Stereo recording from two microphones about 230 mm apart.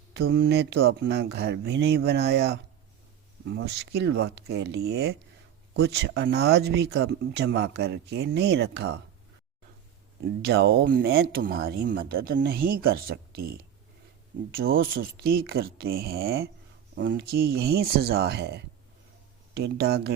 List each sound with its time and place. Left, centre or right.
0.2 s speech: right
10.2 s speech: right